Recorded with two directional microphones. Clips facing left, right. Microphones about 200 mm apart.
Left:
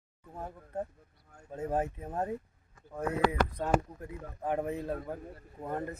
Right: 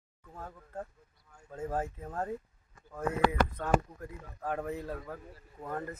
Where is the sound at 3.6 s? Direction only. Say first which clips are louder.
Even; 20° left (ahead or behind).